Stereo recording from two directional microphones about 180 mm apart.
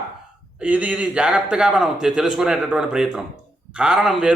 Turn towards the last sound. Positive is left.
turn(degrees=0)  # may be behind; listen again after turning